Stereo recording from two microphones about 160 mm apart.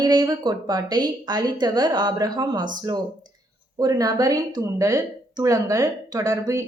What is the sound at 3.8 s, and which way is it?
A woman's voice, 25° right (ahead or behind).